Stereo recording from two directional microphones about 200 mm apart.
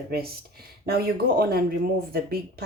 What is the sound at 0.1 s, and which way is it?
Speech, 50° right (ahead or behind).